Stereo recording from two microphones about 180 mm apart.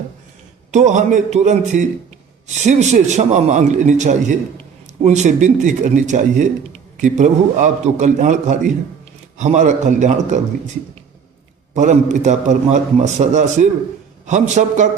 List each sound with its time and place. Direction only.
0.7 s a man's voice: 40° right (ahead or behind)
11.7 s a man's voice: 40° right (ahead or behind)